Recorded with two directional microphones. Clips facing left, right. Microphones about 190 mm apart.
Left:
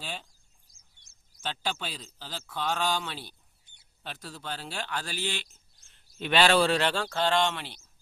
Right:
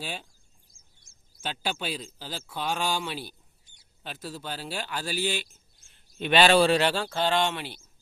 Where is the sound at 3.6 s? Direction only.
60° left (ahead or behind).